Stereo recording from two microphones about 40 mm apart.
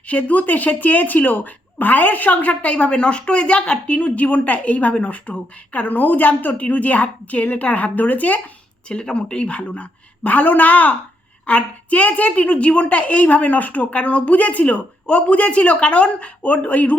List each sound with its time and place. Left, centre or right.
0.1 s a woman's voice: left
8.9 s a woman's voice: left